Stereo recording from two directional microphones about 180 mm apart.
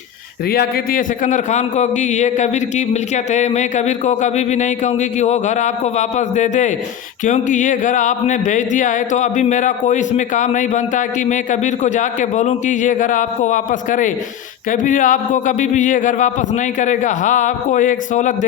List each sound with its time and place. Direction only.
0.4 s a man's voice: 60° left (ahead or behind)